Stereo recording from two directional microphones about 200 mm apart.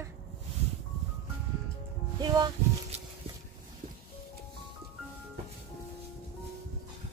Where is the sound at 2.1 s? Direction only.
20° right (ahead or behind).